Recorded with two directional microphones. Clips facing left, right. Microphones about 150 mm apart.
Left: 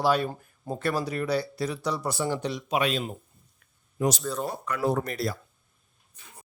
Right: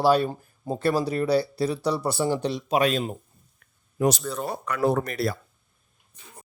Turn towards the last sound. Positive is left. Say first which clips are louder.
# right 3 dB
turn(degrees=-65)  # may be behind; listen again after turning